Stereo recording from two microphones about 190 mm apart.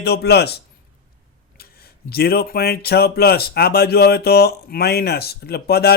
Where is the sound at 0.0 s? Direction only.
60° left (ahead or behind).